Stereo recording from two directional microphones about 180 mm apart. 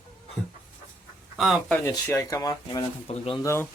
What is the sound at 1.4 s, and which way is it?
Speech, centre (ahead or behind).